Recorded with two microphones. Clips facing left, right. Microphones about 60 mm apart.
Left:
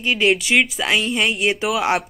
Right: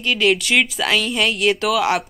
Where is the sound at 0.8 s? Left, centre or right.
Centre.